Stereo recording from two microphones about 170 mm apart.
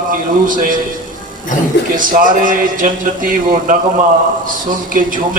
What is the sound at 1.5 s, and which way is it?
Speech, 50° left (ahead or behind).